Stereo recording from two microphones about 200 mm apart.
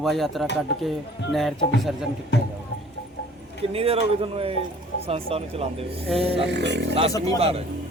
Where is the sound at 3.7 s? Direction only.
30° right (ahead or behind).